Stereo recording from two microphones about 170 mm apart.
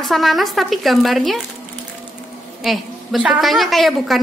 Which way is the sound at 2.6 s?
Centre (ahead or behind).